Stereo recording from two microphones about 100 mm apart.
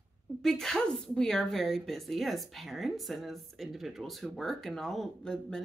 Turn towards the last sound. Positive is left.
turn(degrees=5)  # may be behind; listen again after turning